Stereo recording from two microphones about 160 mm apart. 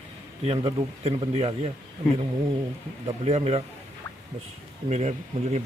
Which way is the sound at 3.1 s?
40° right (ahead or behind).